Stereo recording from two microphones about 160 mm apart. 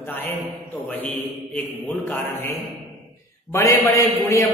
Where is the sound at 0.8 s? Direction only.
10° left (ahead or behind).